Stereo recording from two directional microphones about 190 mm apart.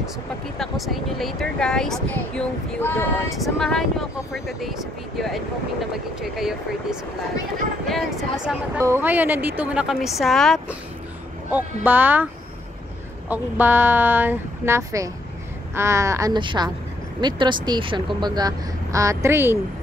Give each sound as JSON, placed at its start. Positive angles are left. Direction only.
{"t": 0.6, "sound": "speech", "side_deg": 0}
{"t": 3.3, "sound": "speech", "side_deg": 0}
{"t": 8.7, "sound": "speech", "side_deg": -10}
{"t": 13.3, "sound": "speech", "side_deg": -10}